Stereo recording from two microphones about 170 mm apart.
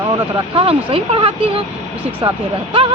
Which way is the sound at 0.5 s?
35° right (ahead or behind).